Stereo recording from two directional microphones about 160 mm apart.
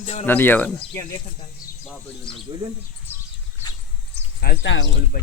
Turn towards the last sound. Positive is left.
turn(degrees=80)